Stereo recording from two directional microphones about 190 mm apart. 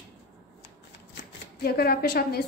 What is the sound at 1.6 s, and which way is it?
Speech, 55° left (ahead or behind).